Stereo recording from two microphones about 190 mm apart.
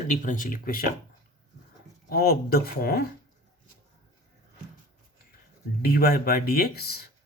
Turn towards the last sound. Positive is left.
turn(degrees=55)  # may be behind; listen again after turning